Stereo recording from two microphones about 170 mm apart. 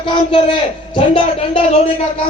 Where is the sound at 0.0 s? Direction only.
30° left (ahead or behind).